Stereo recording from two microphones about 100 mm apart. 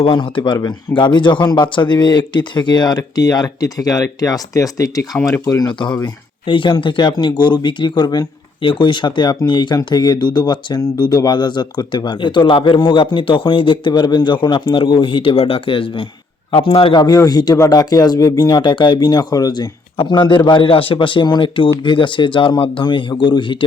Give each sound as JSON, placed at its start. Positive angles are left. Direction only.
{"t": 0.1, "sound": "speech", "side_deg": 55}
{"t": 6.4, "sound": "speech", "side_deg": 55}
{"t": 16.9, "sound": "speech", "side_deg": 40}